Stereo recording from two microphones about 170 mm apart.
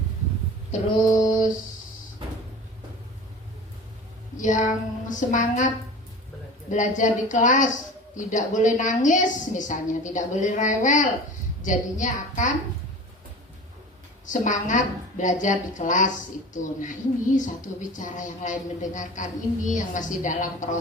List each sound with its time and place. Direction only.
4.4 s a woman's voice: 45° left (ahead or behind)
14.3 s a woman's voice: 45° left (ahead or behind)